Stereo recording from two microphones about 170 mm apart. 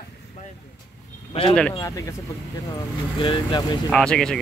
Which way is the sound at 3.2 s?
25° left (ahead or behind).